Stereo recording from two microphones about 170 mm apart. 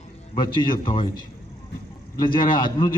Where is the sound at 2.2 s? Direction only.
25° left (ahead or behind).